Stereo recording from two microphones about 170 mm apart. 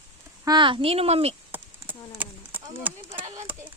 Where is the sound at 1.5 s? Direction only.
10° right (ahead or behind).